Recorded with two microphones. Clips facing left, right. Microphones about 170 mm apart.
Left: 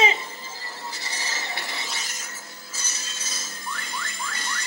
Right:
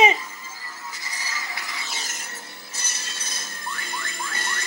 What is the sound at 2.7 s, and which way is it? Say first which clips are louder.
Music: right 1 dB; 60° right (ahead or behind).